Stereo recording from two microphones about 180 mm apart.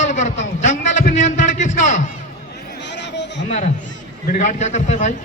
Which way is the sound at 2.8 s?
75° left (ahead or behind).